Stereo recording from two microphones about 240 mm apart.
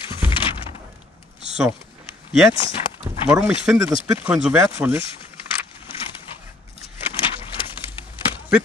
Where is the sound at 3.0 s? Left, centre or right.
Centre.